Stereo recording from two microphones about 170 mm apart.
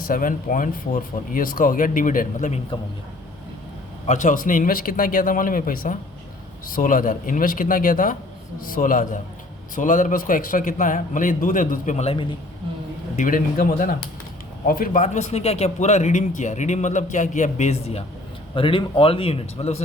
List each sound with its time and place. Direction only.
0.1 s speech: 55° left (ahead or behind)
4.0 s speech: 45° left (ahead or behind)
13.1 s speech: 50° left (ahead or behind)
15.0 s a man's voice: 40° left (ahead or behind)